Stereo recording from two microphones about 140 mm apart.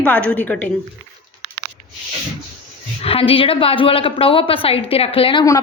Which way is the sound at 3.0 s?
45° left (ahead or behind).